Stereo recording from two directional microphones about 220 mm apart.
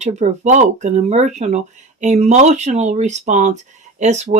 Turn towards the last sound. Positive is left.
turn(degrees=-30)  # may be behind; listen again after turning